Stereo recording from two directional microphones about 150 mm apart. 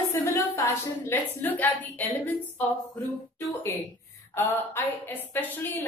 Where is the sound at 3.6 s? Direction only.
15° left (ahead or behind).